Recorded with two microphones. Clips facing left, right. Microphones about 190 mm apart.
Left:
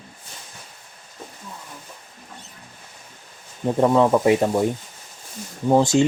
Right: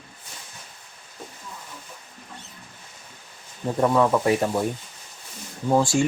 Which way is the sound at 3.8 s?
20° left (ahead or behind).